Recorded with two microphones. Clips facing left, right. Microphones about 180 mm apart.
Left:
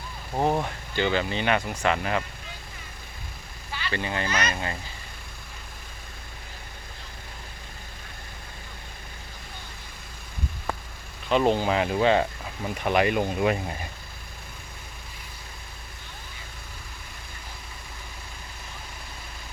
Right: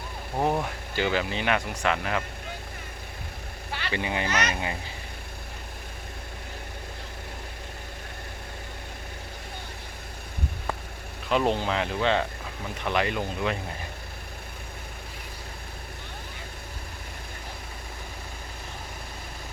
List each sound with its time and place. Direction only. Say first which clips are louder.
0.3 s speech: left 1 dB; centre (ahead or behind)
3.7 s vehicle: even; 65° right (ahead or behind)
3.9 s speech: even; 15° right (ahead or behind)
4.3 s speech: even; 70° right (ahead or behind)
11.3 s speech: left 3 dB; centre (ahead or behind)